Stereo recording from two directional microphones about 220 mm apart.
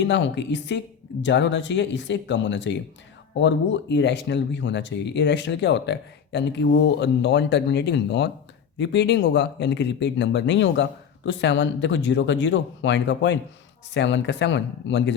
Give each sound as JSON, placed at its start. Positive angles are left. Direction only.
{"t": 0.0, "sound": "speech", "side_deg": 55}